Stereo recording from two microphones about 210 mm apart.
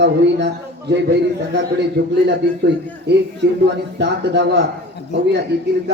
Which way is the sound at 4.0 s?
55° right (ahead or behind).